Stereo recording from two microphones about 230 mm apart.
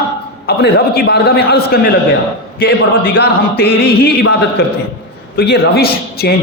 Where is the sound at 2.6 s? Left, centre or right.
Left.